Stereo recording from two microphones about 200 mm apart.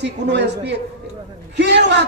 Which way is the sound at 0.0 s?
60° right (ahead or behind).